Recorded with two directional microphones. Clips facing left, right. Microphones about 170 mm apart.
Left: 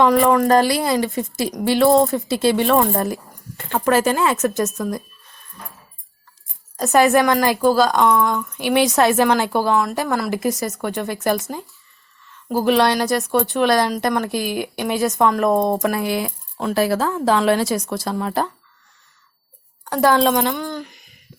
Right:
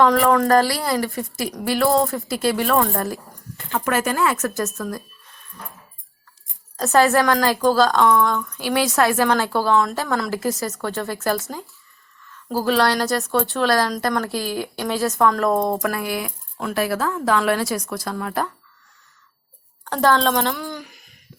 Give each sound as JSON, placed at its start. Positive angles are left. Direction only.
{"t": 0.0, "sound": "speech", "side_deg": 15}
{"t": 3.8, "sound": "speech", "side_deg": 30}
{"t": 6.7, "sound": "a woman's voice", "side_deg": 15}
{"t": 12.5, "sound": "a woman's voice", "side_deg": 20}
{"t": 19.8, "sound": "a woman's voice", "side_deg": 10}
{"t": 20.6, "sound": "a sound", "side_deg": -5}